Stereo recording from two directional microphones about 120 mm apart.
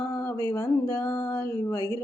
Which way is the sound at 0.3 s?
25° left (ahead or behind).